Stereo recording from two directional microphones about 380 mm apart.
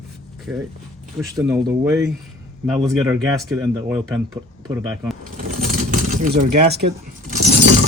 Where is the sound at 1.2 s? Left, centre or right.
Centre.